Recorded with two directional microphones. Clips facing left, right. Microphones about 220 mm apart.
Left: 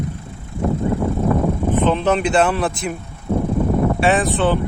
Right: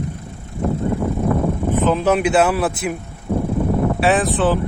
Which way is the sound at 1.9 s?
5° right (ahead or behind).